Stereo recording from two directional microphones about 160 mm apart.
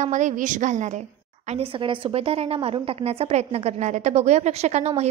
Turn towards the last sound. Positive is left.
turn(degrees=-45)  # may be behind; listen again after turning